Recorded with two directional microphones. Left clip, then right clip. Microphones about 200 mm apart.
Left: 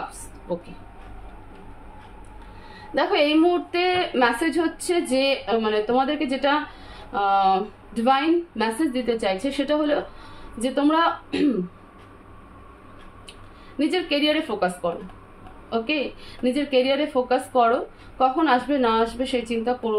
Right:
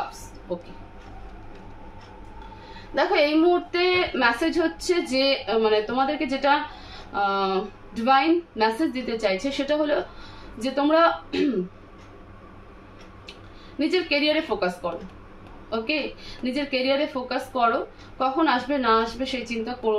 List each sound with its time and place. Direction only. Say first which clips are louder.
0.5 s a woman's voice: left 2 dB; 45° left (ahead or behind)
2.9 s a woman's voice: left 1 dB; 45° left (ahead or behind)
13.7 s a woman's voice: even; 45° left (ahead or behind)
16.4 s a woman's voice: left 4 dB; 45° left (ahead or behind)